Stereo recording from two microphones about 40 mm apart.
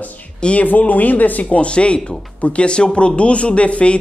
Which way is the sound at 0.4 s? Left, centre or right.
Left.